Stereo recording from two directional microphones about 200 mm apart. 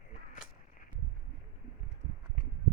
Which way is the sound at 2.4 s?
40° right (ahead or behind).